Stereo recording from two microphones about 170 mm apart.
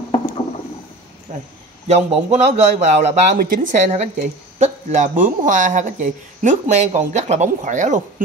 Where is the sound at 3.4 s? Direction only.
55° right (ahead or behind).